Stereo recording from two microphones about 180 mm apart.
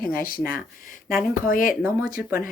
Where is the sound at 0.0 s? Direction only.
55° left (ahead or behind).